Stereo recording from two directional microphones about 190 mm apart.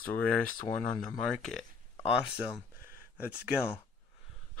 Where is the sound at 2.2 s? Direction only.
5° right (ahead or behind).